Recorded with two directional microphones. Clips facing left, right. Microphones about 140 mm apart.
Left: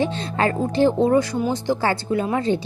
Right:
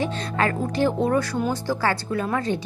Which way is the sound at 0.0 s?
30° left (ahead or behind).